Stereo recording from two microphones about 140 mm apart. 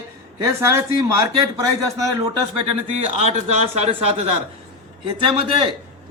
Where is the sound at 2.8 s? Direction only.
50° right (ahead or behind).